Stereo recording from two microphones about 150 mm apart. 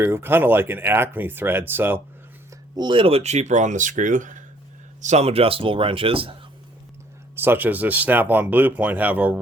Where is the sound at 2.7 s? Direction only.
35° right (ahead or behind); by 4.4 s 60° right (ahead or behind).